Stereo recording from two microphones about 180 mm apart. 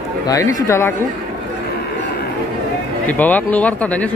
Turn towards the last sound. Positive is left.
turn(degrees=10)  # may be behind; listen again after turning